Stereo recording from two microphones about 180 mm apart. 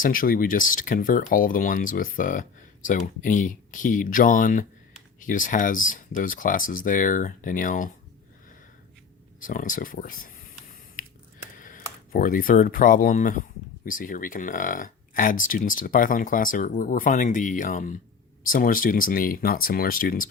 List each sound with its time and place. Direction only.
0.0 s speech: 50° left (ahead or behind)
9.4 s a sound: 45° left (ahead or behind)
11.6 s speech: 50° left (ahead or behind)